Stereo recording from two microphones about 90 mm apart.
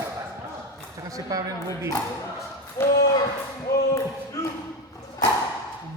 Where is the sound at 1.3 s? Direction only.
45° right (ahead or behind).